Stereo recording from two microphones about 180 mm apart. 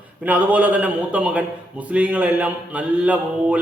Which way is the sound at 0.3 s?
10° right (ahead or behind).